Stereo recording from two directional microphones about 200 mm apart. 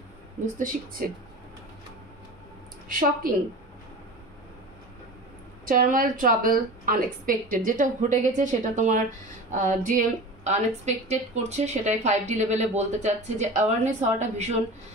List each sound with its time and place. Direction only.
0.6 s speech: 40° right (ahead or behind)
2.9 s a woman's voice: 45° right (ahead or behind)
5.7 s a woman's voice: 45° right (ahead or behind)